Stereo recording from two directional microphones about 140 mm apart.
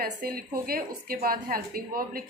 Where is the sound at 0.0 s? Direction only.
90° right.